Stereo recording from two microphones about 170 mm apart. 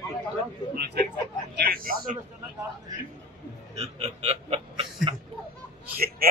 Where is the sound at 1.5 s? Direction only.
60° right (ahead or behind).